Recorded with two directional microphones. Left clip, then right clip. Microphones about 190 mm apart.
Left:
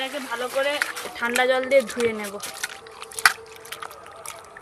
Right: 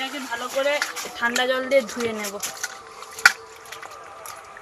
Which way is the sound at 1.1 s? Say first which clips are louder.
Left 1 dB; 10° left (ahead or behind).